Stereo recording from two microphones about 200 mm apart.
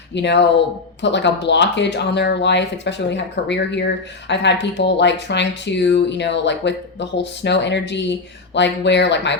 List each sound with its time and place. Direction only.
0.1 s speech: 60° left (ahead or behind)